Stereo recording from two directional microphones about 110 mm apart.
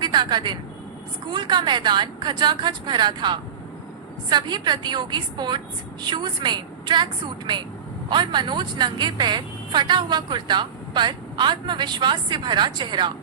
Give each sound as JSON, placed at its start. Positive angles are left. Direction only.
{"t": 0.0, "sound": "a woman's voice", "side_deg": -40}